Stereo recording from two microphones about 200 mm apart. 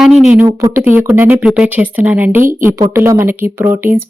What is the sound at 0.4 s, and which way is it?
Speech, 15° right (ahead or behind).